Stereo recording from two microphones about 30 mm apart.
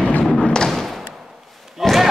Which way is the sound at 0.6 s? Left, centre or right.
Centre.